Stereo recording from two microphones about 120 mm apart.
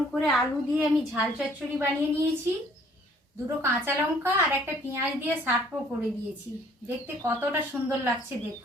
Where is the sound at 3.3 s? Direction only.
20° right (ahead or behind).